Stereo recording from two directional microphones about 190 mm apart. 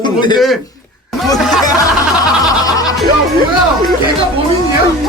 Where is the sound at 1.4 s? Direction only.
Centre (ahead or behind).